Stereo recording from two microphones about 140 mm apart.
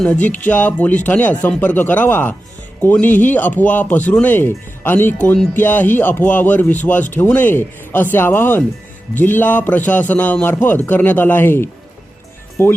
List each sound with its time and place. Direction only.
0.0 s speech: 10° left (ahead or behind)